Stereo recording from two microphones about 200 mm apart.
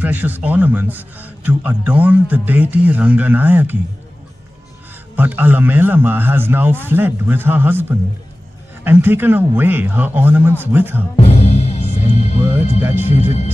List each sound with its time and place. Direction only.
0.0 s a man's voice: 10° right (ahead or behind)
5.1 s a man's voice: 10° right (ahead or behind)
8.8 s a man's voice: 10° right (ahead or behind)
11.1 s music: 30° left (ahead or behind)
13.0 s speech: 35° left (ahead or behind)